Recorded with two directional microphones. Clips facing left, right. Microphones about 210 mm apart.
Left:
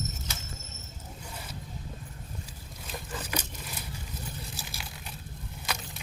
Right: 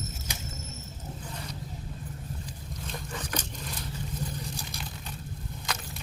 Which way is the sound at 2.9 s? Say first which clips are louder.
Even; 5° left (ahead or behind).